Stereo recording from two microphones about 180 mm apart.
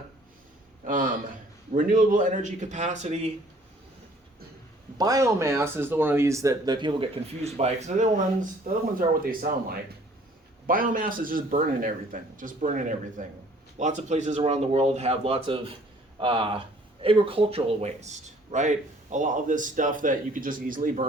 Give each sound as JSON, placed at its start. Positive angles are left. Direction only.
{"t": 0.9, "sound": "speech", "side_deg": -50}
{"t": 4.9, "sound": "speech", "side_deg": -20}